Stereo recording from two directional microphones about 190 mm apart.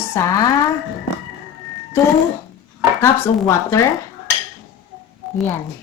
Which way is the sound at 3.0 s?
15° left (ahead or behind).